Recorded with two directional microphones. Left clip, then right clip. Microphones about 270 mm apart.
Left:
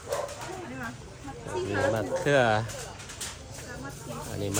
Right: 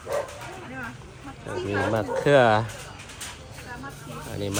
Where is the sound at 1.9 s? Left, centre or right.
Centre.